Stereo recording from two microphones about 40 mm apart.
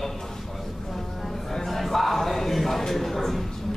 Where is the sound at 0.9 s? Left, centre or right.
Centre.